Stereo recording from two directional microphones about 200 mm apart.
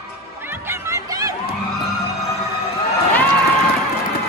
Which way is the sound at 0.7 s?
15° right (ahead or behind).